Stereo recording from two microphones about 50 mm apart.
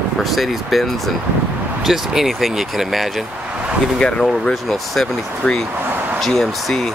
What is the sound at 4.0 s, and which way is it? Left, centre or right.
Speech, centre.